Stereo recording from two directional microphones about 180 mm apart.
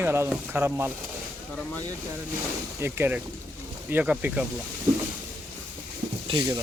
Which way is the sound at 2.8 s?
10° right (ahead or behind).